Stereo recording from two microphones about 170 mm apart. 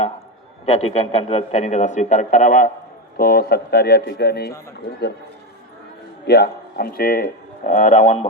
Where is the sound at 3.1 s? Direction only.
60° left (ahead or behind).